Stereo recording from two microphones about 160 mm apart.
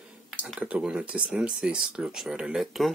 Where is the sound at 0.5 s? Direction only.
5° right (ahead or behind).